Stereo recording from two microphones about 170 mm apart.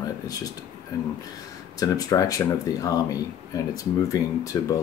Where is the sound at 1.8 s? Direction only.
20° left (ahead or behind).